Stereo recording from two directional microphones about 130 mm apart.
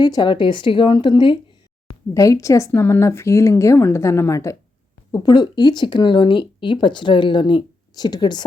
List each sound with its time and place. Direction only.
0.0 s speech: 35° left (ahead or behind)
2.1 s a woman's voice: 25° left (ahead or behind)